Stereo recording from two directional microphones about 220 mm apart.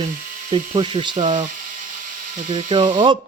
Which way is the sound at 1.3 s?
35° right (ahead or behind).